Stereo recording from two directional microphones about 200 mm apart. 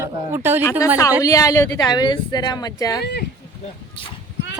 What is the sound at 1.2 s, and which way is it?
A woman's voice, 15° left (ahead or behind).